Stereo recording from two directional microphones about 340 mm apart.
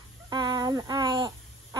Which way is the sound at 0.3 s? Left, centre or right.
Centre.